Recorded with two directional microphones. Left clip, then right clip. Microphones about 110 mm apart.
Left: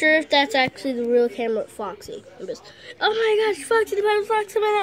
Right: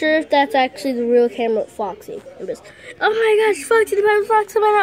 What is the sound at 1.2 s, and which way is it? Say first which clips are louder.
Speech: right 5 dB; 15° left (ahead or behind).